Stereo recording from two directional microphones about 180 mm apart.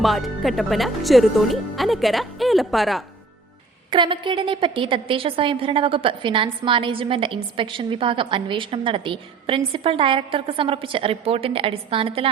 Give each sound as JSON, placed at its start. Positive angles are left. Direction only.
{"t": 0.0, "sound": "speech", "side_deg": 0}
{"t": 3.9, "sound": "a woman's voice", "side_deg": -25}